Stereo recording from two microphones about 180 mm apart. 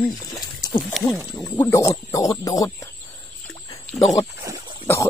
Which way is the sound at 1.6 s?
15° left (ahead or behind).